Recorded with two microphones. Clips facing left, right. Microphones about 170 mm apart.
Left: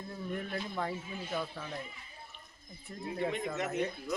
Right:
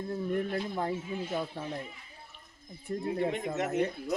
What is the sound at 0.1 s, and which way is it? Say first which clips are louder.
Speech: right 7 dB; 35° right (ahead or behind).